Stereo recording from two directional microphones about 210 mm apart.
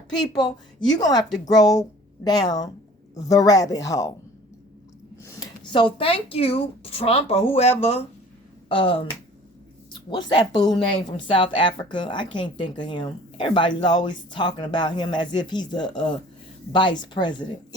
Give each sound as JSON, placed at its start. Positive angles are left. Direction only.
{"t": 0.1, "sound": "a woman's voice", "side_deg": 20}
{"t": 5.2, "sound": "a woman's voice", "side_deg": 20}